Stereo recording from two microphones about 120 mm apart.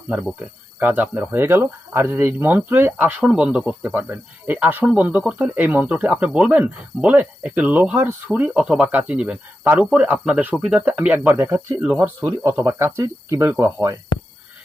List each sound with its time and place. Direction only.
0.3 s speech: 15° right (ahead or behind)